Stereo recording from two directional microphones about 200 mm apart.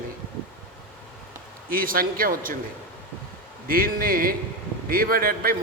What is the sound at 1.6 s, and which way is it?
Speech, 45° right (ahead or behind).